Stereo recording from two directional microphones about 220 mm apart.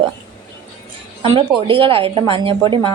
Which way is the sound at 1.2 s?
25° right (ahead or behind).